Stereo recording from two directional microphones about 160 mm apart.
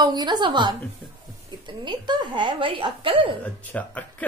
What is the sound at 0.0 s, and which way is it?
A woman's voice, 25° right (ahead or behind).